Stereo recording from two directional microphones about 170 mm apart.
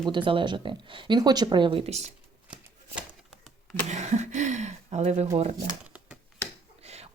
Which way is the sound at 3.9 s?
45° right (ahead or behind).